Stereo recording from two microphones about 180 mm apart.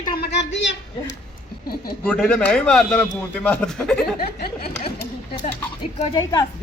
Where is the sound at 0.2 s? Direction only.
75° left (ahead or behind).